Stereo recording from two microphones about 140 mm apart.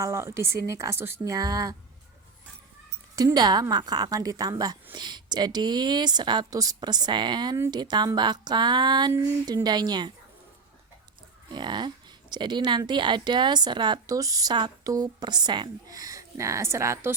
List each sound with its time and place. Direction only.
0.0 s a woman's voice: 20° right (ahead or behind)
3.2 s a woman's voice: 30° right (ahead or behind)
9.1 s a sound: 20° right (ahead or behind)
9.6 s a woman's voice: 30° right (ahead or behind)
11.5 s a woman's voice: 30° right (ahead or behind)